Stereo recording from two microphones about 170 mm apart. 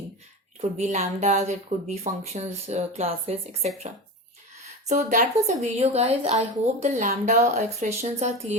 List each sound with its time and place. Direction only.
0.6 s speech: 40° right (ahead or behind)
4.9 s speech: 45° right (ahead or behind)